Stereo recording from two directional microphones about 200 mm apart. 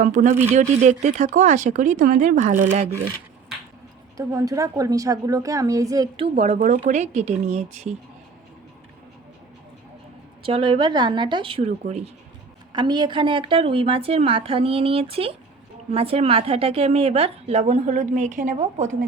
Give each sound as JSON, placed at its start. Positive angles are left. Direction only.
{"t": 0.0, "sound": "a woman's voice", "side_deg": -40}
{"t": 4.2, "sound": "a woman's voice", "side_deg": -15}
{"t": 6.3, "sound": "a woman's voice", "side_deg": -40}
{"t": 10.4, "sound": "a woman's voice", "side_deg": -25}